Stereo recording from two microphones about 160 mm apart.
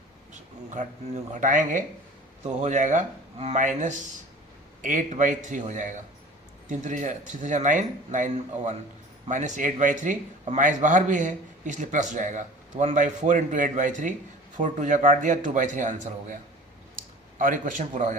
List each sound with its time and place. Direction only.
0.7 s a man's voice: 50° right (ahead or behind)